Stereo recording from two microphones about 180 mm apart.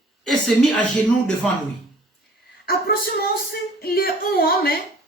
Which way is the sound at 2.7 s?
60° left (ahead or behind).